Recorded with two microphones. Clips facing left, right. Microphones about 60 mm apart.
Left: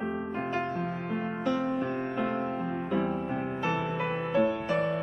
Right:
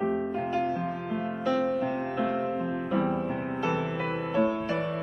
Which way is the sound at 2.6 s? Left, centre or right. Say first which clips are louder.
Right 2 dB; centre.